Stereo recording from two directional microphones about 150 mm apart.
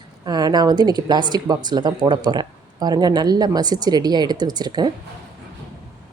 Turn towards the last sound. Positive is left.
turn(degrees=-30)  # may be behind; listen again after turning